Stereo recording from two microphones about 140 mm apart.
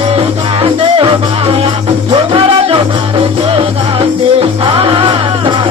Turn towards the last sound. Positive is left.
turn(degrees=-40)  # may be behind; listen again after turning